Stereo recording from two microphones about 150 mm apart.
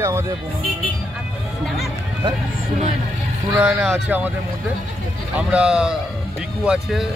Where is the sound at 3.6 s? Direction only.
10° right (ahead or behind).